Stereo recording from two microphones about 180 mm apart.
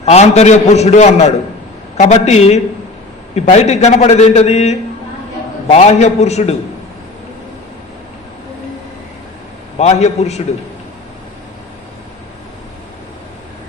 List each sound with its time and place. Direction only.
0.0 s a man's voice: 35° left (ahead or behind)
9.7 s a man's voice: 40° left (ahead or behind)